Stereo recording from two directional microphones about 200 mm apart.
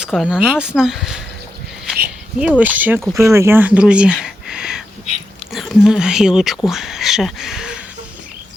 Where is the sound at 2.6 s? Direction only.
10° right (ahead or behind).